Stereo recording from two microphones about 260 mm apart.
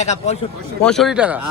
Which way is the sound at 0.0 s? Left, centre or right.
Left.